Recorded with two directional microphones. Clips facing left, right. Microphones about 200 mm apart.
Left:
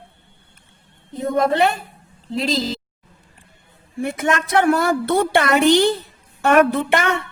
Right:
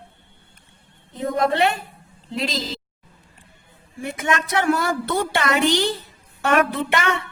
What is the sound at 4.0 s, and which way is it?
A woman's voice, 55° left (ahead or behind).